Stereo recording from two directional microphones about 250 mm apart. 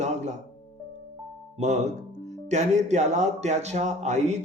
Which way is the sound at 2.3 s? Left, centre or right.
Right.